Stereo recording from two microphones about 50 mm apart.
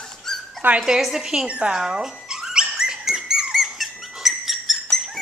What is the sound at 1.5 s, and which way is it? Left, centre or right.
Speech, right.